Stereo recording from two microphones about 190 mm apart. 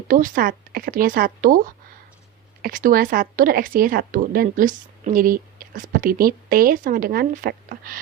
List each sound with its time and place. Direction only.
0.1 s speech: 45° right (ahead or behind)